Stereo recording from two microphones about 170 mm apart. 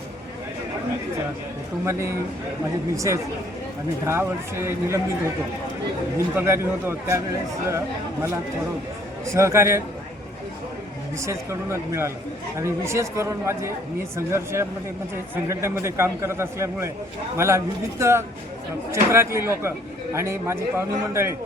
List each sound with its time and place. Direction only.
1.8 s a man's voice: 15° right (ahead or behind)
6.1 s a man's voice: 15° right (ahead or behind)
9.2 s a man's voice: 15° right (ahead or behind)
11.2 s a man's voice: 15° right (ahead or behind)